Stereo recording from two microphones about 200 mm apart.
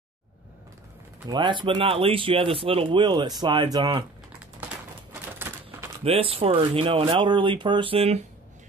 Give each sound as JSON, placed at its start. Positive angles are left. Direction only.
{"t": 1.2, "sound": "speech", "side_deg": -20}
{"t": 5.4, "sound": "a sound", "side_deg": -10}
{"t": 6.0, "sound": "speech", "side_deg": -30}